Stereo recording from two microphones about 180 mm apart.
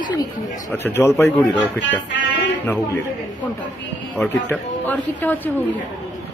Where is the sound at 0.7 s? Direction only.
10° left (ahead or behind).